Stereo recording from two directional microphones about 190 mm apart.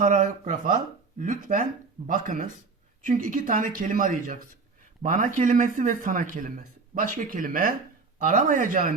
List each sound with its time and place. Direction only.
0.0 s speech: 40° right (ahead or behind)